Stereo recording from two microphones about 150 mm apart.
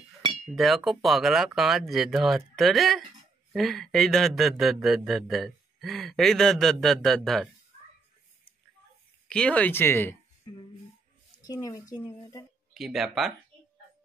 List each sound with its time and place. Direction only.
0.6 s speech: centre (ahead or behind)
9.3 s speech: 5° left (ahead or behind)
11.3 s speech: 25° left (ahead or behind)
12.7 s speech: centre (ahead or behind)